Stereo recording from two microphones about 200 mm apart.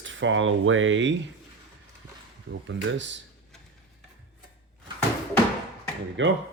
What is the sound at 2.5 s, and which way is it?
Speech, 65° right (ahead or behind).